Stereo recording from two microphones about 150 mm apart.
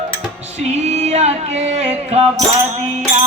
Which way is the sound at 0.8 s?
45° right (ahead or behind).